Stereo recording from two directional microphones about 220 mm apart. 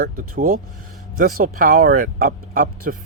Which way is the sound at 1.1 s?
40° right (ahead or behind).